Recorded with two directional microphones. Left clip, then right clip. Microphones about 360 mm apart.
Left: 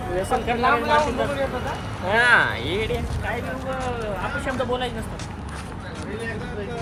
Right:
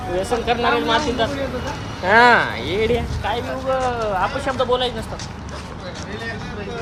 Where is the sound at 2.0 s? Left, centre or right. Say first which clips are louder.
Right 7 dB; right.